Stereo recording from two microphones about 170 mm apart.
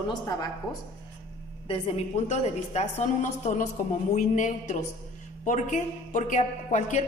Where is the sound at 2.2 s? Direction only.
40° left (ahead or behind).